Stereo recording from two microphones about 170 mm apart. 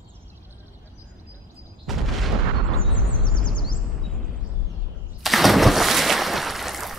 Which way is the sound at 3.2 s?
25° left (ahead or behind).